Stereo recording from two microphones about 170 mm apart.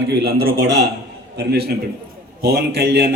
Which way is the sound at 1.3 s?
70° right (ahead or behind).